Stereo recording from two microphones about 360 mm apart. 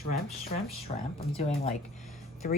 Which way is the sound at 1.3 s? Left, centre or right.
Centre.